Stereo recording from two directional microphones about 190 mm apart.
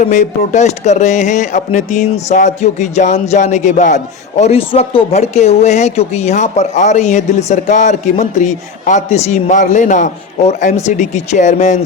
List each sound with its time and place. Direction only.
0.0 s speech: 40° left (ahead or behind)